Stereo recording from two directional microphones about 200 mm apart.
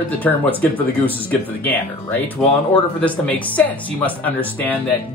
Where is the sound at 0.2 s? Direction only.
10° left (ahead or behind).